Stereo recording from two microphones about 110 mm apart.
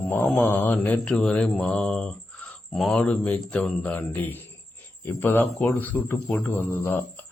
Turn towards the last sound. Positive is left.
turn(degrees=15)  # may be behind; listen again after turning